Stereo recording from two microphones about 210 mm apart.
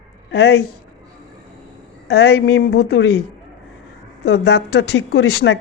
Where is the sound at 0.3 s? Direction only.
50° left (ahead or behind).